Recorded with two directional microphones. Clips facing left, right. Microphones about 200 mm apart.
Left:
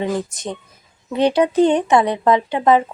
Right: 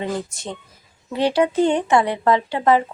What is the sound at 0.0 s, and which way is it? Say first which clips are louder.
A woman's voice: left 4 dB; 20° left (ahead or behind).